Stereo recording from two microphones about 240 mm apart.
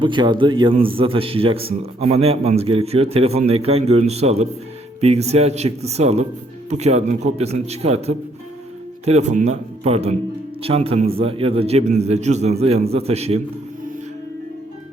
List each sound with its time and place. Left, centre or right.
0.0 s a man's voice: centre